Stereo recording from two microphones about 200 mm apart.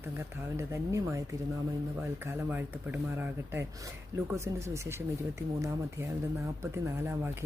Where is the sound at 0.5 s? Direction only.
15° right (ahead or behind).